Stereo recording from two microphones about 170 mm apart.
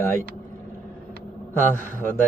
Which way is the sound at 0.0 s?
15° left (ahead or behind).